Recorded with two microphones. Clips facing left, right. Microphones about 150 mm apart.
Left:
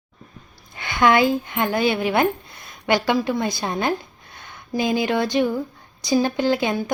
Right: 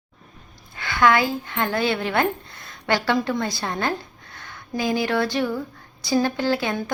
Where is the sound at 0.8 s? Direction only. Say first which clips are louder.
Left 2 dB; 20° left (ahead or behind).